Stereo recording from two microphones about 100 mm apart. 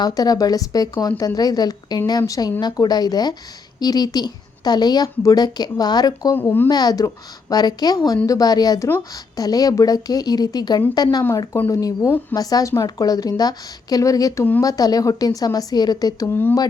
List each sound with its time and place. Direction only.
0.0 s a woman's voice: 40° left (ahead or behind)
6.3 s speech: 20° left (ahead or behind)
6.7 s a woman's voice: 40° left (ahead or behind)
16.3 s speech: 20° left (ahead or behind)